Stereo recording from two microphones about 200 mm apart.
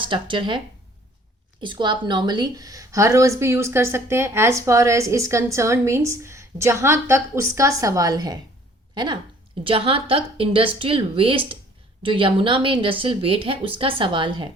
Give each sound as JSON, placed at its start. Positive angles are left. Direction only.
{"t": 0.0, "sound": "a woman's voice", "side_deg": -25}
{"t": 1.6, "sound": "a woman's voice", "side_deg": -25}
{"t": 9.6, "sound": "a woman's voice", "side_deg": -25}